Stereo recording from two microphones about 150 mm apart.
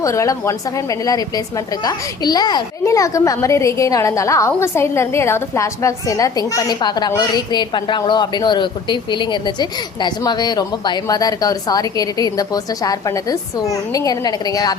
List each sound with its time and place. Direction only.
0.0 s a woman's voice: 20° left (ahead or behind)